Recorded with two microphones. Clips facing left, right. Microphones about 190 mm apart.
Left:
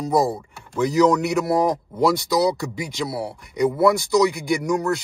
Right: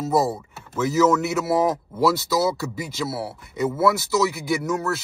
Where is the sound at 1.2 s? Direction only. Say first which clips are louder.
Left 1 dB; 5° right (ahead or behind).